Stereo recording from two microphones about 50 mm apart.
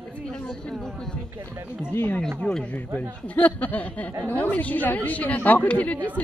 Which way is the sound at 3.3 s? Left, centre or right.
Left.